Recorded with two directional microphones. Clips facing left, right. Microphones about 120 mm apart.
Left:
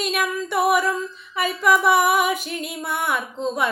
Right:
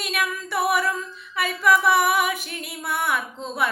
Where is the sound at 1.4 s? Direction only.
25° left (ahead or behind).